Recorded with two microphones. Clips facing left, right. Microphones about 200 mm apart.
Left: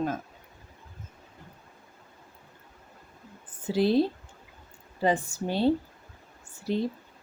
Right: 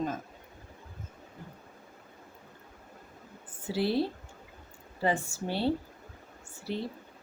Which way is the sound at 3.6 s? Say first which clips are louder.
Left 5 dB; 20° left (ahead or behind).